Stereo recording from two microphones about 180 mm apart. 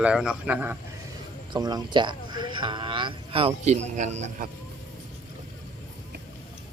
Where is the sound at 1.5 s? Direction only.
25° right (ahead or behind); by 4.4 s 40° right (ahead or behind).